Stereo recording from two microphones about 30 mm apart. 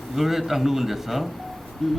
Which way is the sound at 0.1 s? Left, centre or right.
Centre.